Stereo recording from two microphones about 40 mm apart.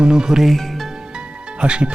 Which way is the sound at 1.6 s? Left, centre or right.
Right.